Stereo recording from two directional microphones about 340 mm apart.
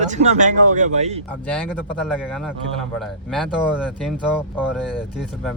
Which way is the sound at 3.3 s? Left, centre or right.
Centre.